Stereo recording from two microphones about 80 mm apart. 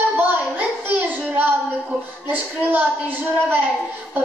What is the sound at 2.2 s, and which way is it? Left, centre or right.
Speech, right.